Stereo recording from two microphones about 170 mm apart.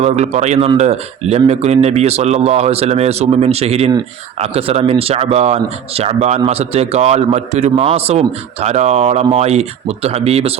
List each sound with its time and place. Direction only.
0.0 s speech: 40° right (ahead or behind)